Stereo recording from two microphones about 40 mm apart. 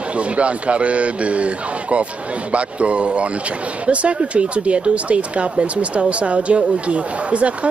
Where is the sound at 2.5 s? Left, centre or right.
Right.